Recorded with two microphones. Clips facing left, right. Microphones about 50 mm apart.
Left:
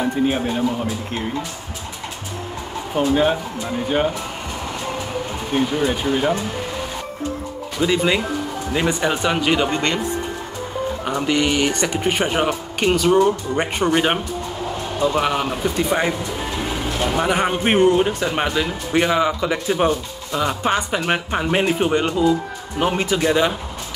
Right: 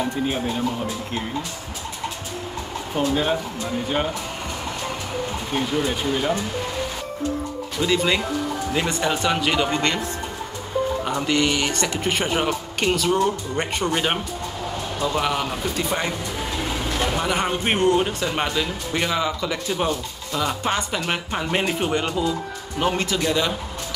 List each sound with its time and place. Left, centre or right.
0.0 s speech: centre
2.9 s speech: centre
5.5 s speech: centre
7.8 s speech: centre
11.1 s a man's voice: centre